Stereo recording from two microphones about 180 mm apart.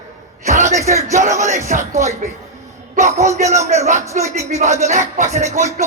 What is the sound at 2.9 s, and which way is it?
A man's voice, 40° right (ahead or behind).